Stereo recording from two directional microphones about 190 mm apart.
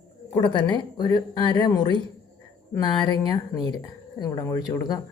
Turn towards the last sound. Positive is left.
turn(degrees=20)  # may be behind; listen again after turning